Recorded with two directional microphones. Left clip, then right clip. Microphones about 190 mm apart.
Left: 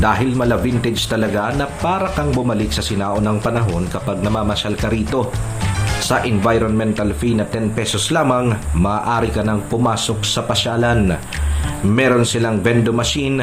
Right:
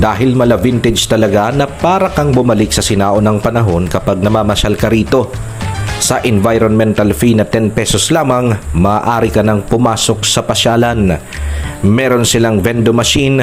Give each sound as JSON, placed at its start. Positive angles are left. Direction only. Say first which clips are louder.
{"t": 0.0, "sound": "speech", "louder": "right 5 dB", "side_deg": -40}